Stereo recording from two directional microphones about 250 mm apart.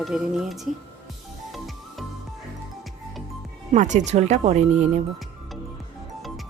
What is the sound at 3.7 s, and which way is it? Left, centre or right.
Speech, right.